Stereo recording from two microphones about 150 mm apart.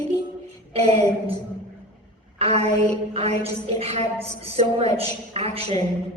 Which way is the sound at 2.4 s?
45° right (ahead or behind).